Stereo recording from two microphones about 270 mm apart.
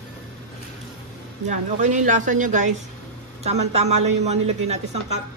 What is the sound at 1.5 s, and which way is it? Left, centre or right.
A woman's voice, right.